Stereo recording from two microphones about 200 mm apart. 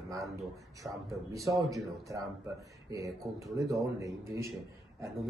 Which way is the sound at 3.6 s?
15° right (ahead or behind).